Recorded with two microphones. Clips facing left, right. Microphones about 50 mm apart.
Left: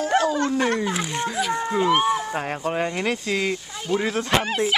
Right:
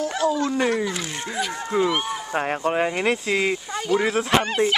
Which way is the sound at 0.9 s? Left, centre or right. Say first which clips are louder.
Left 3 dB; centre.